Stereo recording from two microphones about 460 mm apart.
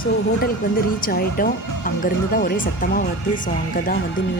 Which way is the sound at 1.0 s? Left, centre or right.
Centre.